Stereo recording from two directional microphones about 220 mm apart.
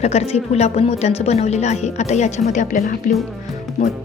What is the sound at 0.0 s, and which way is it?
A woman's voice, 30° left (ahead or behind).